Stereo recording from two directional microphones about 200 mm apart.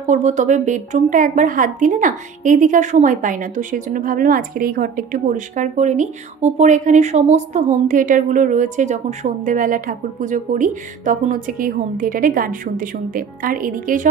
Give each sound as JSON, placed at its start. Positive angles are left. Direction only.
{"t": 0.0, "sound": "a woman's voice", "side_deg": -35}